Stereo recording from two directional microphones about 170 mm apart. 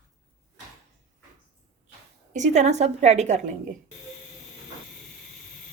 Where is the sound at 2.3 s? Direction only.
45° right (ahead or behind).